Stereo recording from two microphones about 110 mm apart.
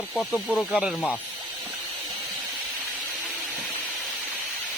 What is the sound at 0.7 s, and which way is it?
Speech, 5° right (ahead or behind).